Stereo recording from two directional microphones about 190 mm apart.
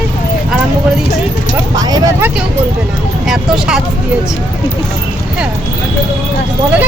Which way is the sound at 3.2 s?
Centre (ahead or behind).